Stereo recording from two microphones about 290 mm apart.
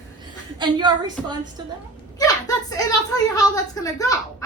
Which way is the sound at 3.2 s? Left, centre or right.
Centre.